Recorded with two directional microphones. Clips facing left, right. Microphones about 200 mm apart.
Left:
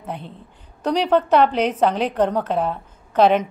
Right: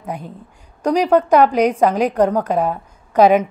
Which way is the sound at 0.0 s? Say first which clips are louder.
Right 3 dB; 10° right (ahead or behind).